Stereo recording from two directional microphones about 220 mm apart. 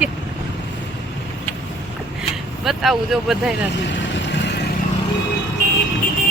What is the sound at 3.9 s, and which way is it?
Vehicle, 55° left (ahead or behind).